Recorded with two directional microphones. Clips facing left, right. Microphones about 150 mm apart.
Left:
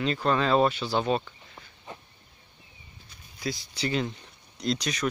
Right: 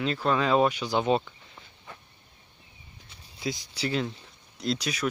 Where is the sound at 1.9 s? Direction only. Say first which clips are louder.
Left 4 dB; 20° left (ahead or behind).